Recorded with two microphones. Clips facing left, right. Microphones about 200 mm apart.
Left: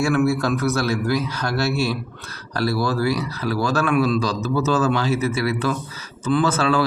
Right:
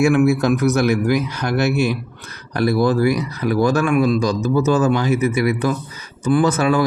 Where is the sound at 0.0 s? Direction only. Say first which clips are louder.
Right 4 dB; 15° right (ahead or behind).